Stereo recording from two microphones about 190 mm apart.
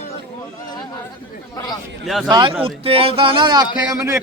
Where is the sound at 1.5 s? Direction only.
20° left (ahead or behind).